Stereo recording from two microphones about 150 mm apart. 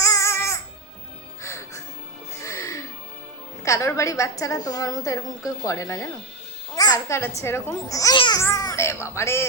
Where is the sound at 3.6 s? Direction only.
20° left (ahead or behind).